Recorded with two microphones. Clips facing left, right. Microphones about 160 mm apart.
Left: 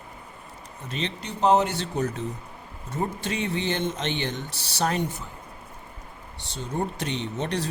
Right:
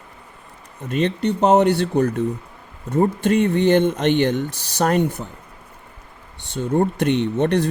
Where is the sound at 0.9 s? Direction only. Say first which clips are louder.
Right 12 dB; 55° right (ahead or behind).